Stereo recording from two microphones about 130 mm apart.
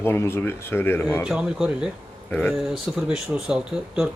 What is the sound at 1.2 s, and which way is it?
Speech, 5° right (ahead or behind).